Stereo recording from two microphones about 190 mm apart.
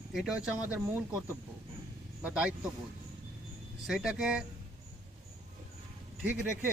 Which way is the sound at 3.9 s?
Centre (ahead or behind).